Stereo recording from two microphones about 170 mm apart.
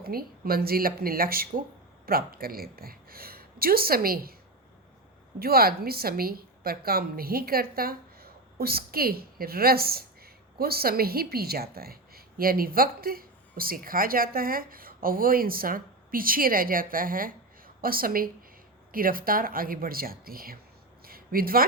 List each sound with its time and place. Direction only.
0.0 s a woman's voice: 60° right (ahead or behind)
5.4 s a woman's voice: 60° right (ahead or behind)
21.0 s a sound: 60° right (ahead or behind)